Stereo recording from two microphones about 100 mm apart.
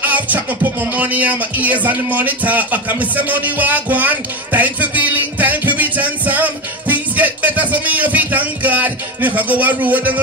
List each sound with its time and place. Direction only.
0.0 s speech: 15° right (ahead or behind)